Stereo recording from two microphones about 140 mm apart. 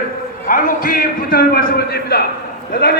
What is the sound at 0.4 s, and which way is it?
A man's voice, 80° left.